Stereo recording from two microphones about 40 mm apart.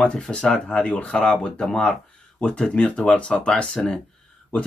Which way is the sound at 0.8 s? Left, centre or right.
Left.